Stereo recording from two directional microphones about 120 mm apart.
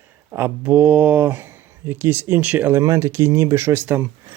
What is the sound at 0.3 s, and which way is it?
Speech, 15° right (ahead or behind).